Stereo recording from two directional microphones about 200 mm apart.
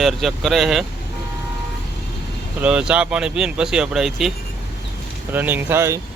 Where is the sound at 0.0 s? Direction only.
Centre (ahead or behind).